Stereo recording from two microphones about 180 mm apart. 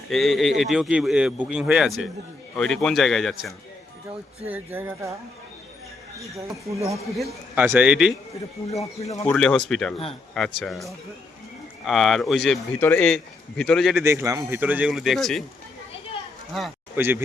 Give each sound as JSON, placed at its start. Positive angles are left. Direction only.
{"t": 0.1, "sound": "a man's voice", "side_deg": 0}
{"t": 4.4, "sound": "speech", "side_deg": -10}
{"t": 6.1, "sound": "speech", "side_deg": -15}
{"t": 7.2, "sound": "a man's voice", "side_deg": 0}
{"t": 8.7, "sound": "speech", "side_deg": 35}
{"t": 9.3, "sound": "a man's voice", "side_deg": 5}
{"t": 13.9, "sound": "speech", "side_deg": -15}
{"t": 16.5, "sound": "a man's voice", "side_deg": 0}
{"t": 16.9, "sound": "speech", "side_deg": -10}